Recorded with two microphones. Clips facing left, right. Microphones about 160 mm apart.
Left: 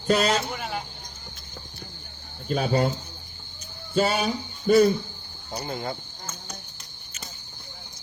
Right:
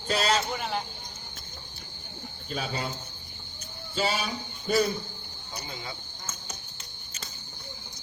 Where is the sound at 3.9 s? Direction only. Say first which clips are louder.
Left 6 dB; 55° left (ahead or behind).